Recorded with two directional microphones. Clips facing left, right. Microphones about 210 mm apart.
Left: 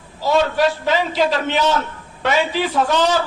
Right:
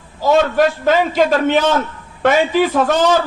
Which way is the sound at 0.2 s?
50° right (ahead or behind).